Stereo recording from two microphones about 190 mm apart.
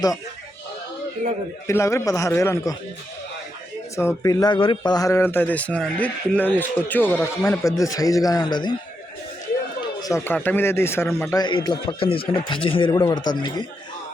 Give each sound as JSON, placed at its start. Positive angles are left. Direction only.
{"t": 1.6, "sound": "speech", "side_deg": 15}
{"t": 3.9, "sound": "speech", "side_deg": 15}
{"t": 9.8, "sound": "a man's voice", "side_deg": 20}